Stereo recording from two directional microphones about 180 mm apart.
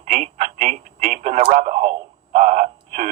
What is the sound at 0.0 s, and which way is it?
Telephone, 40° right (ahead or behind).